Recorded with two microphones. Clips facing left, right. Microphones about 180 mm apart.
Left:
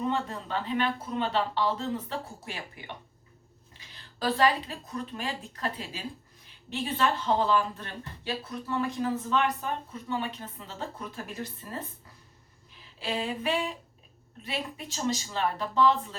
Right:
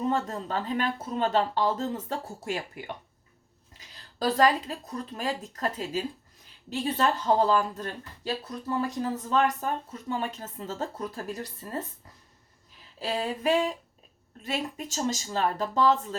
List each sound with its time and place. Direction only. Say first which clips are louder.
0.0 s speech: right 2 dB; 40° right (ahead or behind)
13.0 s speech: right 2 dB; 40° right (ahead or behind)